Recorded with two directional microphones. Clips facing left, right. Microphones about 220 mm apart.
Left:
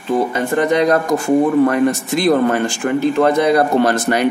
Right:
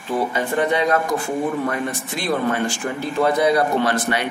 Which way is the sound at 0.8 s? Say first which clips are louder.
Left 5 dB; 40° left (ahead or behind).